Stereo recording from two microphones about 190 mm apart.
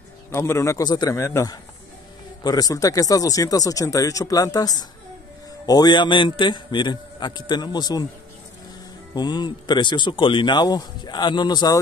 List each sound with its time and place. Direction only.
0.3 s a man's voice: 15° left (ahead or behind)
9.1 s speech: 20° left (ahead or behind)